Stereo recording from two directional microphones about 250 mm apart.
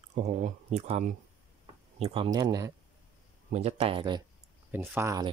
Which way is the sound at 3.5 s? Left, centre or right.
Right.